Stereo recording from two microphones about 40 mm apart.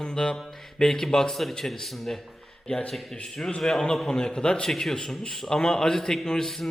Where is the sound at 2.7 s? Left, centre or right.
Left.